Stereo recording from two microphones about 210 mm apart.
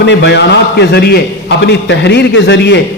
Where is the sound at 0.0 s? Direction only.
55° left (ahead or behind).